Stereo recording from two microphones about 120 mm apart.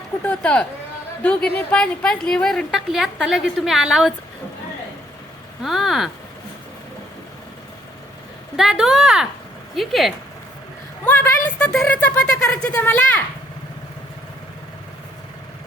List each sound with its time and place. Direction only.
0.2 s a woman's voice: 10° left (ahead or behind)
5.6 s a woman's voice: centre (ahead or behind)
8.5 s a woman's voice: 5° right (ahead or behind)
11.0 s a sound: 15° left (ahead or behind)
11.9 s speech: 10° left (ahead or behind)